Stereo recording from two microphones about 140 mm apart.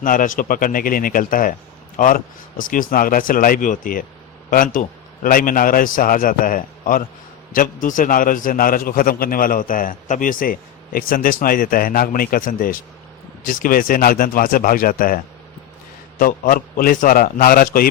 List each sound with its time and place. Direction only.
0.0 s a man's voice: 75° left (ahead or behind); by 17.8 s 90° left